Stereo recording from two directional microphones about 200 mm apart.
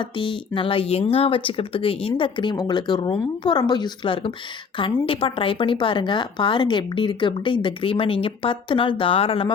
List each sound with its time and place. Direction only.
0.2 s speech: 25° left (ahead or behind)